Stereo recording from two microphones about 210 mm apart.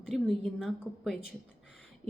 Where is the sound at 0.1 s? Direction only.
Centre (ahead or behind).